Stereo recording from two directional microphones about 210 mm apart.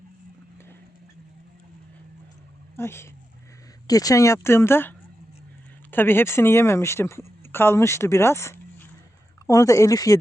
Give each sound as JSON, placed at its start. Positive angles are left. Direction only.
{"t": 2.7, "sound": "speech", "side_deg": 10}